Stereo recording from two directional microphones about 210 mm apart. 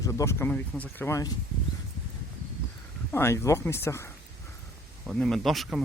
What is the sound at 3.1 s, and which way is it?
Speech, 15° left (ahead or behind).